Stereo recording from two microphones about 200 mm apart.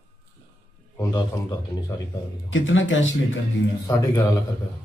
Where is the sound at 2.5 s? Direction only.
75° left (ahead or behind).